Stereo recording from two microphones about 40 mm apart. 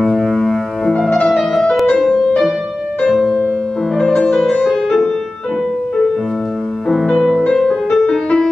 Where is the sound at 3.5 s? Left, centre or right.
Centre.